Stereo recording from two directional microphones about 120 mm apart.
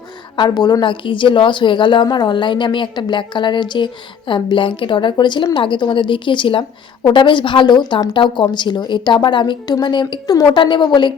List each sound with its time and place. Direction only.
0.3 s a woman's voice: 35° left (ahead or behind)